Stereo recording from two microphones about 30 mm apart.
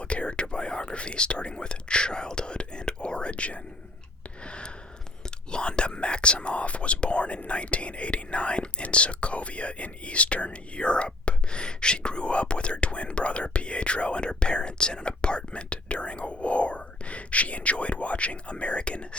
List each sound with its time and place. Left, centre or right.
0.0 s speech: left
4.4 s a sound: left
5.5 s speech: left